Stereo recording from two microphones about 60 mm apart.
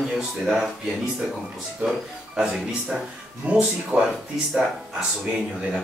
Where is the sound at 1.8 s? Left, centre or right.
Centre.